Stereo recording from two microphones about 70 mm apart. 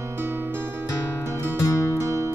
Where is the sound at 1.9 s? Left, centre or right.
Right.